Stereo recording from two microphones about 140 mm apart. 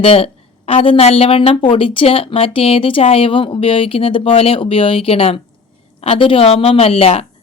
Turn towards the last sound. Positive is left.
turn(degrees=45)  # may be behind; listen again after turning